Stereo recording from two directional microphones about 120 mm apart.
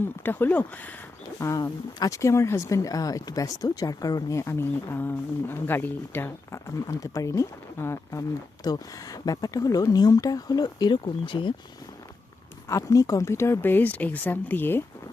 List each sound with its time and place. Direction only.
0.2 s speech: 15° left (ahead or behind)
1.4 s speech: 25° left (ahead or behind); by 11.5 s 45° left (ahead or behind)
12.6 s speech: 25° left (ahead or behind)